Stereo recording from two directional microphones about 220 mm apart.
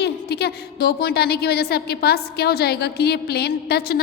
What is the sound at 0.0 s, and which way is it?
A woman's voice, 50° left (ahead or behind).